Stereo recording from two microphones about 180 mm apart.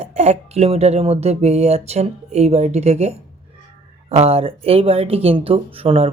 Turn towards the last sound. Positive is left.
turn(degrees=-35)  # may be behind; listen again after turning